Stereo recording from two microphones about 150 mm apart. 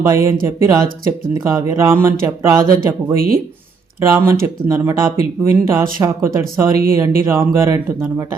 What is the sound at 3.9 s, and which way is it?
Speech, 15° right (ahead or behind).